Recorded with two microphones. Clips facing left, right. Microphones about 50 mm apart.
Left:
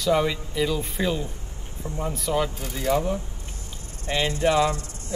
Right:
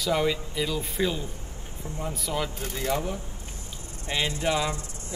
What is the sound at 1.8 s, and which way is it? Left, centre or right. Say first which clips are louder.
Speech: left 4 dB; centre.